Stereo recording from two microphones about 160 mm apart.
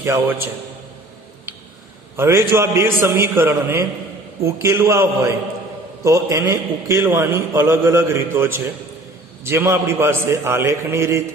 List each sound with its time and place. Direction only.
0.0 s a man's voice: 15° right (ahead or behind)
2.1 s a man's voice: 15° right (ahead or behind)